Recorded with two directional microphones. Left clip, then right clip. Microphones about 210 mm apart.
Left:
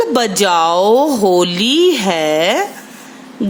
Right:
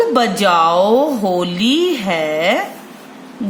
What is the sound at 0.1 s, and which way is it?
A woman's voice, 50° left (ahead or behind).